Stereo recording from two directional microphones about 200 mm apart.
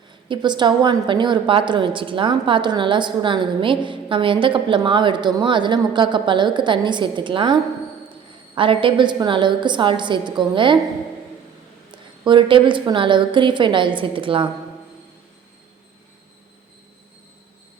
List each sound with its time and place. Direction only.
0.3 s a woman's voice: 20° right (ahead or behind)
11.9 s a woman's voice: 25° right (ahead or behind)